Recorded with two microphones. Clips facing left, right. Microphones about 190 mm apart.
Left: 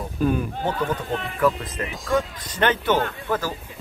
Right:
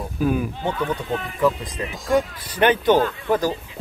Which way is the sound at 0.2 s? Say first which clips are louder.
Right 1 dB; 5° right (ahead or behind).